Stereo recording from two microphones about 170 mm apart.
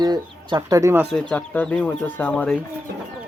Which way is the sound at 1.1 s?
5° left (ahead or behind).